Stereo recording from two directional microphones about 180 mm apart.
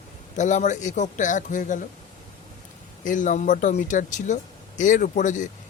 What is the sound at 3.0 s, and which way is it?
A man's voice, 45° left (ahead or behind).